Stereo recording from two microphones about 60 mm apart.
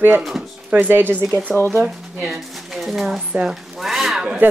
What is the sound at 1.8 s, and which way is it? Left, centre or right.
Speech, centre.